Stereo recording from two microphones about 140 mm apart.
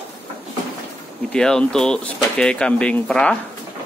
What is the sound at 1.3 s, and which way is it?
Speech, 5° left (ahead or behind).